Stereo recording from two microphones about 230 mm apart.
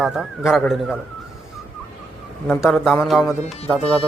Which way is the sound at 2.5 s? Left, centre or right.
Centre.